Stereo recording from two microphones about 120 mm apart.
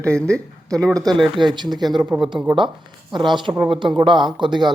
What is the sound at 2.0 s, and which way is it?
Speech, 10° right (ahead or behind).